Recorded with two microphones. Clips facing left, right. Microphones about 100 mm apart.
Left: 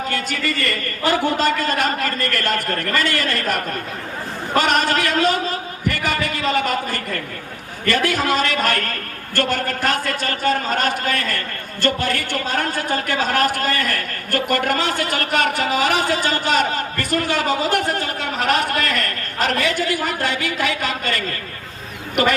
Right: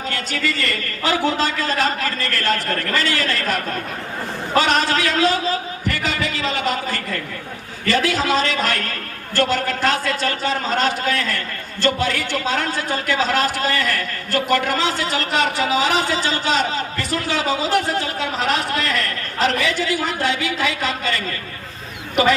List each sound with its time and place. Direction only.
0.1 s a man's voice: 50° left (ahead or behind)